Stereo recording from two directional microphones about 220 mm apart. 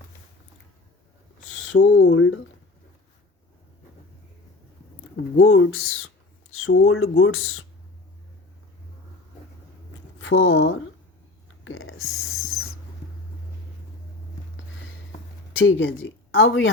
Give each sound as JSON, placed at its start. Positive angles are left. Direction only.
{"t": 1.7, "sound": "speech", "side_deg": 55}
{"t": 5.1, "sound": "speech", "side_deg": 65}
{"t": 10.2, "sound": "speech", "side_deg": 70}
{"t": 15.5, "sound": "speech", "side_deg": 60}